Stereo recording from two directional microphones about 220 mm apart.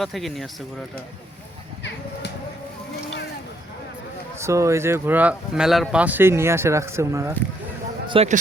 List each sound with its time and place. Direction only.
0.0 s speech: centre (ahead or behind)
4.4 s speech: 15° right (ahead or behind)
8.0 s speech: 25° right (ahead or behind)